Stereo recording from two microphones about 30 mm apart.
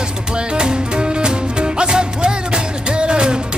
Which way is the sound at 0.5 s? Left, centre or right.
Right.